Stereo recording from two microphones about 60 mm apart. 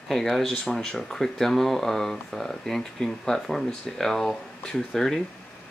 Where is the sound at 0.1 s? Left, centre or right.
Centre.